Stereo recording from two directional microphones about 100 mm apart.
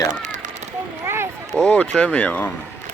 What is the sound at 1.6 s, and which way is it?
Speech, 10° left (ahead or behind).